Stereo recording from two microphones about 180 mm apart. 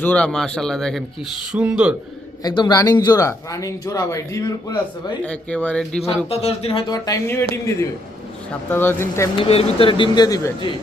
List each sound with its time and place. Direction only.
0.0 s speech: 5° left (ahead or behind)
2.4 s speech: 25° left (ahead or behind)
5.2 s speech: 5° left (ahead or behind)
6.2 s speech: 35° left (ahead or behind); by 9.3 s 15° left (ahead or behind)
9.4 s speech: 30° left (ahead or behind)